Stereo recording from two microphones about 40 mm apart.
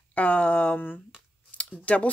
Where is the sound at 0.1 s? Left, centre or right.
Left.